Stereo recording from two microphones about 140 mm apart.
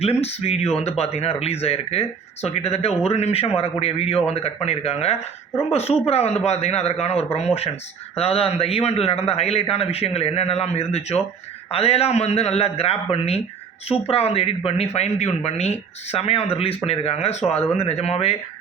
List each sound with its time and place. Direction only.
0.0 s speech: 45° left (ahead or behind)